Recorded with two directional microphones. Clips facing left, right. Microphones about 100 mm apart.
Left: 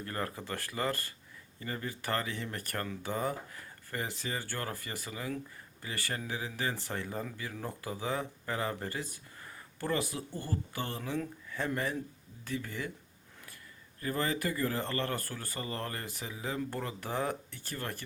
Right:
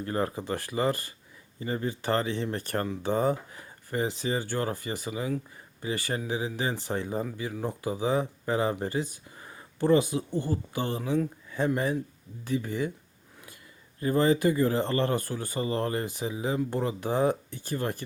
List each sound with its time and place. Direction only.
0.0 s speech: 20° right (ahead or behind)
14.0 s speech: 20° right (ahead or behind)